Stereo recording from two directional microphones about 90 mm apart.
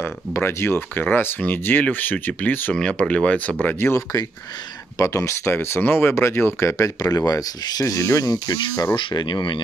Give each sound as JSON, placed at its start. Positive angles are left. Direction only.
{"t": 0.0, "sound": "speech", "side_deg": 30}
{"t": 2.7, "sound": "speech", "side_deg": 10}
{"t": 3.6, "sound": "speech", "side_deg": 30}
{"t": 8.9, "sound": "speech", "side_deg": 60}